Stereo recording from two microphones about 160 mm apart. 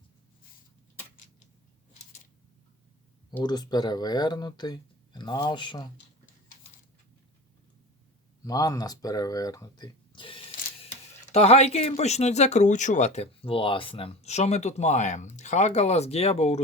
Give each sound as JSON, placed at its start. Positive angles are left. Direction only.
{"t": 3.4, "sound": "speech", "side_deg": 25}
{"t": 8.4, "sound": "speech", "side_deg": 25}
{"t": 11.3, "sound": "speech", "side_deg": 40}